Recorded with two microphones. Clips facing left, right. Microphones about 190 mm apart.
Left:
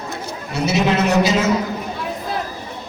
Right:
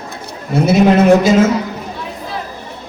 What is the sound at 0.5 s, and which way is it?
Speech, 50° right (ahead or behind).